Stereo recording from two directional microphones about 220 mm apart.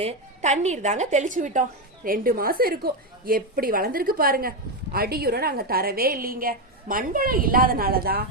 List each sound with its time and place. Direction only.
0.0 s a woman's voice: 30° right (ahead or behind)